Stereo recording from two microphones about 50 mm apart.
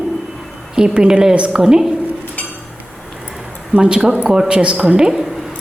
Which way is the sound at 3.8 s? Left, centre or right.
Right.